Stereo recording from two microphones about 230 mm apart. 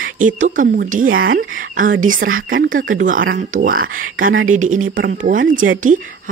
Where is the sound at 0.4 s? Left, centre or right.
Right.